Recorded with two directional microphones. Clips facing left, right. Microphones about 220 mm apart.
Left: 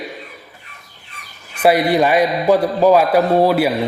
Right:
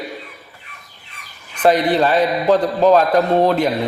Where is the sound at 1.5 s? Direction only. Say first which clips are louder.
Left 1 dB; 10° left (ahead or behind).